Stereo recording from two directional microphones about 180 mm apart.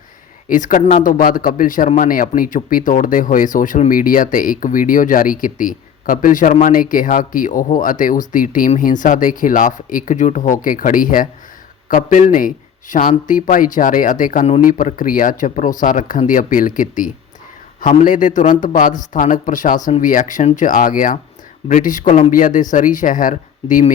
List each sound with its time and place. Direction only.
0.4 s speech: 45° left (ahead or behind)